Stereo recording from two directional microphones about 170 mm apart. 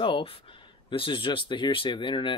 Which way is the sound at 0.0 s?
30° left (ahead or behind).